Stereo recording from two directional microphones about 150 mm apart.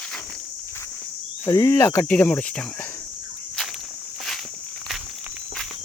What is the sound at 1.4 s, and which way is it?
Speech, 20° left (ahead or behind).